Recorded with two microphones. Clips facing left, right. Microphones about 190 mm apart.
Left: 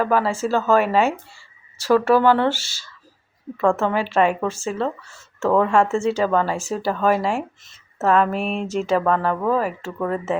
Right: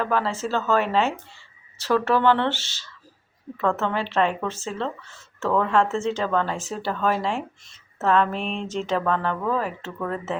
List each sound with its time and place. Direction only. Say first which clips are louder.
0.0 s speech: left 5 dB; 10° left (ahead or behind)